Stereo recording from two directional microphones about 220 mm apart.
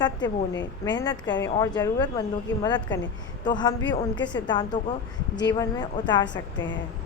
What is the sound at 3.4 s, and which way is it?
A woman's voice, 20° left (ahead or behind).